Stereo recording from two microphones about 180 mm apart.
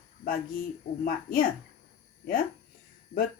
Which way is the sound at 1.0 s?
50° left (ahead or behind).